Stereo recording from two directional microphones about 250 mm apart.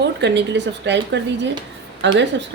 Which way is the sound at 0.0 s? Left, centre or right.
Right.